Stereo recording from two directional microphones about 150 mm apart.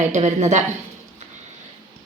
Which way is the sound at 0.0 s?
55° right (ahead or behind).